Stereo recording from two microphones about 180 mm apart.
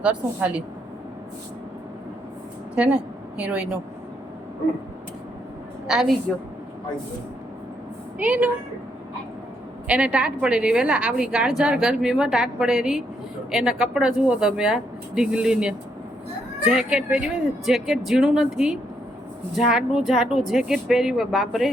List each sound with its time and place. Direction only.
0.0 s a woman's voice: 5° right (ahead or behind)
2.7 s a woman's voice: 5° right (ahead or behind)
5.9 s a woman's voice: centre (ahead or behind)
8.2 s a woman's voice: 10° right (ahead or behind)
9.8 s a woman's voice: 5° right (ahead or behind)